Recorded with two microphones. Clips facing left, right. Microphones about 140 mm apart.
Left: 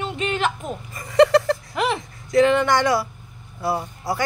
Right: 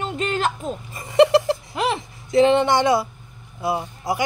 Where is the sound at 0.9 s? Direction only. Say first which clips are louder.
Even; 25° right (ahead or behind).